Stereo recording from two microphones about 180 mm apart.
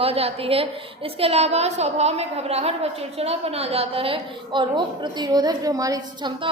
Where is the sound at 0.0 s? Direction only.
35° right (ahead or behind).